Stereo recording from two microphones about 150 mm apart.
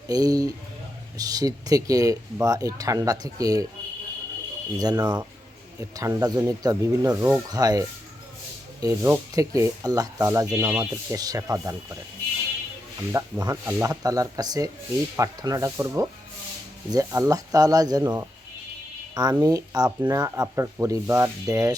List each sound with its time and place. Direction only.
0.1 s speech: 25° right (ahead or behind)
4.8 s speech: 25° right (ahead or behind)
13.1 s speech: 20° right (ahead or behind)